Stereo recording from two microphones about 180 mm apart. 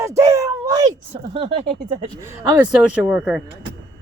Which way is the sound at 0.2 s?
15° right (ahead or behind).